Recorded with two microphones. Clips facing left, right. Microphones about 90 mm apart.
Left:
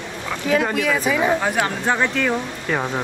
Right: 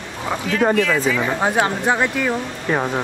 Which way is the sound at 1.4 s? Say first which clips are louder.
Right 3 dB; 25° right (ahead or behind).